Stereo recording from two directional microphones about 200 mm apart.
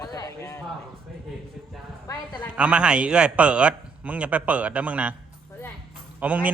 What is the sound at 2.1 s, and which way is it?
Speech, 10° left (ahead or behind).